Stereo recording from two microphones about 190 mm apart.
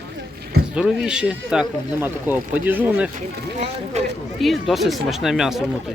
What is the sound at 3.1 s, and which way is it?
Speech, 35° right (ahead or behind).